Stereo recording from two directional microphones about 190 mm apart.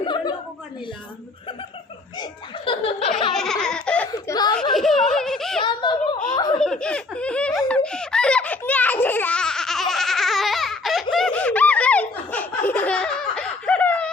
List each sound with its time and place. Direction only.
0.0 s a sound: 25° left (ahead or behind)
2.1 s speech: 25° left (ahead or behind)
3.3 s baby laughter: 5° left (ahead or behind)
4.1 s chuckle: 20° left (ahead or behind)
4.7 s giggle: centre (ahead or behind)
5.6 s a sound: 25° left (ahead or behind)
6.3 s laughter: 25° left (ahead or behind)
6.6 s laughter: 5° left (ahead or behind)
7.9 s baby laughter: 5° left (ahead or behind)
11.1 s laughter: 5° left (ahead or behind)